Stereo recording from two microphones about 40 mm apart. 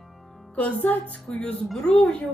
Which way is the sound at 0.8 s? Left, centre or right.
Left.